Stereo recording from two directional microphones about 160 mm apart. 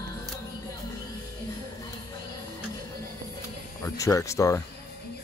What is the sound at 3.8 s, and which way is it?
Speech, 20° left (ahead or behind).